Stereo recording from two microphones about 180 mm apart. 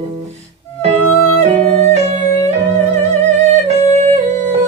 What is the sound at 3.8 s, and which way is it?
Music, 40° right (ahead or behind).